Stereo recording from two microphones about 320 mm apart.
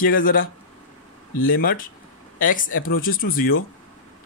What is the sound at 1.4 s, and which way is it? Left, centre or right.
Speech, left.